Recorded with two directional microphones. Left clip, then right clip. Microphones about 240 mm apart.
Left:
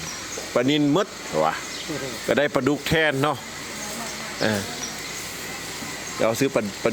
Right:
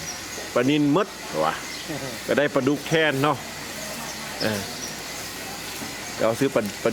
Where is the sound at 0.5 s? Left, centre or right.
Centre.